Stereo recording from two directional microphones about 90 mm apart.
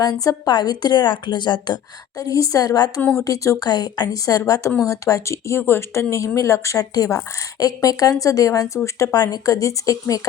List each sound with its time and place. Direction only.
0.0 s a woman's voice: 45° left (ahead or behind)
3.0 s speech: 10° left (ahead or behind)
3.2 s speech: 40° left (ahead or behind)